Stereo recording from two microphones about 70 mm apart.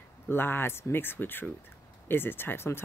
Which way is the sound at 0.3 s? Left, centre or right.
Left.